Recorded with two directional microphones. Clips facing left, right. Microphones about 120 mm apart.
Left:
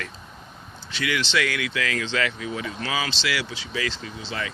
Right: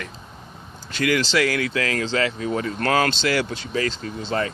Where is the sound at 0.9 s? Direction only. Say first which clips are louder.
Right 5 dB; 45° right (ahead or behind).